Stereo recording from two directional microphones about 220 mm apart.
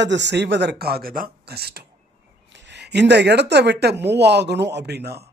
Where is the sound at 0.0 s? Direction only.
55° right (ahead or behind).